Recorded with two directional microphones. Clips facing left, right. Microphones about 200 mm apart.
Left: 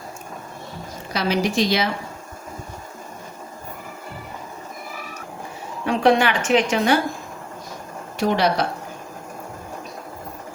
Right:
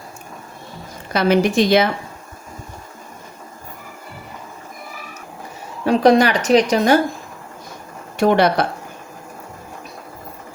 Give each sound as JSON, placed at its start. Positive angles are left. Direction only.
{"t": 1.1, "sound": "a woman's voice", "side_deg": -55}
{"t": 5.8, "sound": "a woman's voice", "side_deg": -40}
{"t": 8.2, "sound": "a woman's voice", "side_deg": -55}